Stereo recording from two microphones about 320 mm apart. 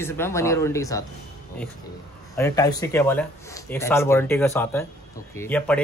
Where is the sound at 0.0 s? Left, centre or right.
Centre.